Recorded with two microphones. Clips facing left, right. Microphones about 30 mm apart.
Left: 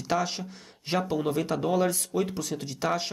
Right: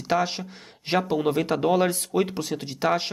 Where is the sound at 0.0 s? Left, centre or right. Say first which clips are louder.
Right 4 dB; right.